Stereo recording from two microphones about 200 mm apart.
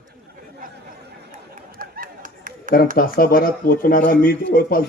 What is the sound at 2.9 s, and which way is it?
Speech, 45° left (ahead or behind).